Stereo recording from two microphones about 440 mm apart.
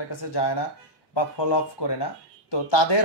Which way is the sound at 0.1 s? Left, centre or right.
Left.